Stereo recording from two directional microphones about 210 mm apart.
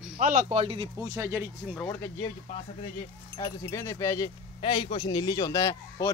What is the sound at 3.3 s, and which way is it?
Speech, 15° left (ahead or behind).